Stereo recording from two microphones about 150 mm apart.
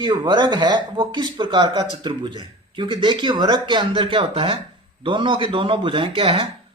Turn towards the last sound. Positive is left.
turn(degrees=-40)  # may be behind; listen again after turning